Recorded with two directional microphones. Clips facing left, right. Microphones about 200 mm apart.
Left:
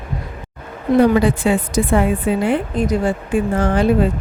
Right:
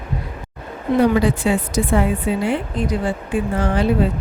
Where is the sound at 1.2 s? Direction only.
50° left (ahead or behind).